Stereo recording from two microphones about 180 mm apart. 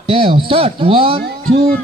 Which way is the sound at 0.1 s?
30° right (ahead or behind).